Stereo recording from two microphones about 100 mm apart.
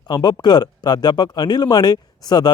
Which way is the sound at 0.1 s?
45° left (ahead or behind).